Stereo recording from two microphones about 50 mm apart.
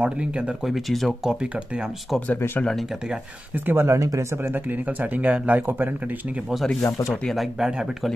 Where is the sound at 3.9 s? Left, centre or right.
Right.